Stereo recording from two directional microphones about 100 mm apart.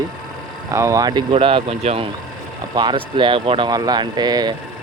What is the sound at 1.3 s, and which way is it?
Speech, 65° right (ahead or behind).